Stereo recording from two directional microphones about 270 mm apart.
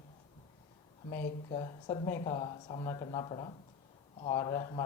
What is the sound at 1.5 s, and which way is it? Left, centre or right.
Speech, centre.